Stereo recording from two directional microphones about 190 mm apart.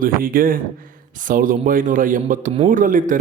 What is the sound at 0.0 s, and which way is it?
Speech, 50° right (ahead or behind).